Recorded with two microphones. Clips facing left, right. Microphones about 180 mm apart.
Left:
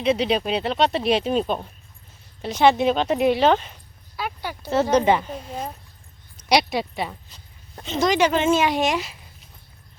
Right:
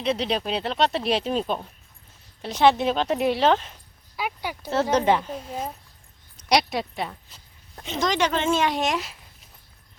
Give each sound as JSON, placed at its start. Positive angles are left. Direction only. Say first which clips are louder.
{"t": 0.0, "sound": "speech", "louder": "left 4 dB", "side_deg": 0}
{"t": 4.2, "sound": "speech", "louder": "even", "side_deg": -10}
{"t": 4.7, "sound": "speech", "louder": "left 3 dB", "side_deg": 0}